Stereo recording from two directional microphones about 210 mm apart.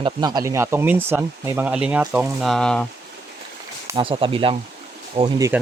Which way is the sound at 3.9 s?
25° right (ahead or behind).